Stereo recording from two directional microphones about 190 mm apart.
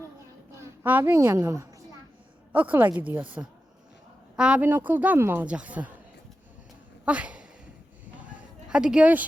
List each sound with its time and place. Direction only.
0.5 s a woman's voice: 10° right (ahead or behind)
7.0 s a sound: 5° right (ahead or behind)
8.7 s speech: 5° right (ahead or behind)